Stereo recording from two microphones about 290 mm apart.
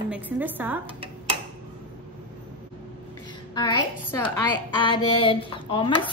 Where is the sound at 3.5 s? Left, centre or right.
Centre.